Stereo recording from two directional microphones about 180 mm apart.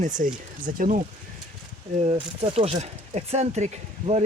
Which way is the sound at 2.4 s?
35° right (ahead or behind).